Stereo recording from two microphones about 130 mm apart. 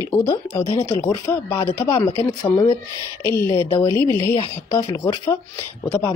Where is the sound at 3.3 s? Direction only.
25° left (ahead or behind).